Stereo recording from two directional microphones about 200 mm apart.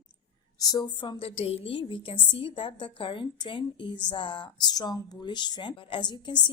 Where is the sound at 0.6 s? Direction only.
20° left (ahead or behind).